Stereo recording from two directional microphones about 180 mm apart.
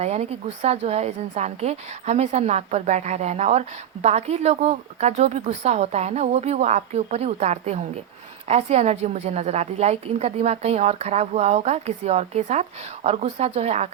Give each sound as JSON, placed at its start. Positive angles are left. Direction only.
{"t": 0.0, "sound": "a woman's voice", "side_deg": -35}